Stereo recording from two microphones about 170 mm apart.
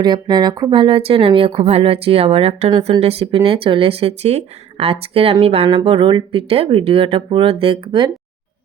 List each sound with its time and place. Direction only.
0.0 s speech: 25° right (ahead or behind)